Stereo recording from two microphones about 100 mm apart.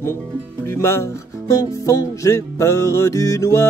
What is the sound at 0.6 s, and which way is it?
Speech, 30° left (ahead or behind).